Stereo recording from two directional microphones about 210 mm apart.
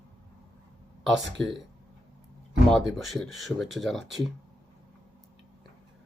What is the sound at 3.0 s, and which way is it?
Speech, centre (ahead or behind).